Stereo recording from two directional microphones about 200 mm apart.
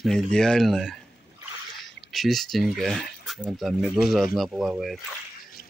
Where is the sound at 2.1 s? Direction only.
Centre (ahead or behind).